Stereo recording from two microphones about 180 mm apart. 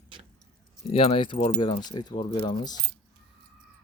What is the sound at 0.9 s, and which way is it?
Speech, 30° left (ahead or behind).